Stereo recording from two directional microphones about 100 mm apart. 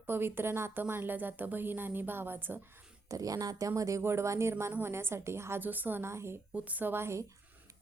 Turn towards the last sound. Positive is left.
turn(degrees=-25)  # may be behind; listen again after turning